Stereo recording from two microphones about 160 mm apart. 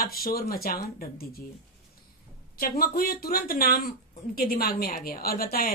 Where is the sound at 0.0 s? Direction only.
70° left (ahead or behind).